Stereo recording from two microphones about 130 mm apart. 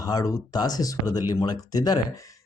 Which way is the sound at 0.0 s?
30° left (ahead or behind).